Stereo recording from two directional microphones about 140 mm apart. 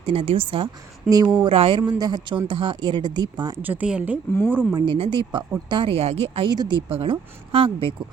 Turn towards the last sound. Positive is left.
turn(degrees=-40)  # may be behind; listen again after turning